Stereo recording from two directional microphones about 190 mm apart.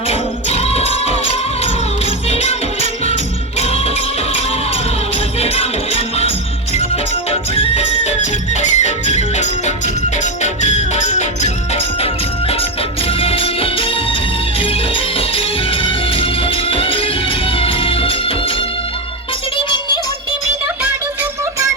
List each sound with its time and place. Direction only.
0.1 s music: 35° left (ahead or behind)
2.3 s music: 35° left (ahead or behind)
3.6 s music: 30° left (ahead or behind)
5.4 s music: 35° left (ahead or behind)